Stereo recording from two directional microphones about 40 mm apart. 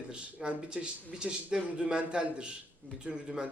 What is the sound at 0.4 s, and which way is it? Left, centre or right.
Speech, right.